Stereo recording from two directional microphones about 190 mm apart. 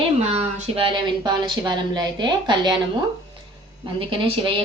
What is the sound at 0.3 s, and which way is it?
Speech, 30° right (ahead or behind).